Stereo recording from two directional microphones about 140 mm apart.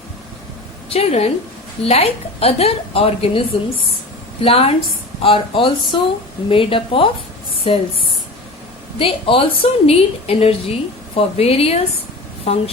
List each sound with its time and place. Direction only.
0.9 s a woman's voice: 45° left (ahead or behind)
4.4 s a woman's voice: 45° left (ahead or behind)
9.0 s a woman's voice: 40° left (ahead or behind)